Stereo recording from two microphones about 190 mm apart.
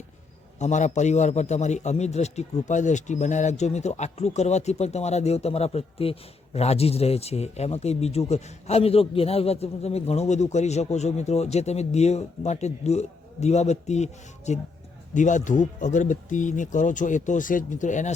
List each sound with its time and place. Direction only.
0.6 s a man's voice: 40° left (ahead or behind)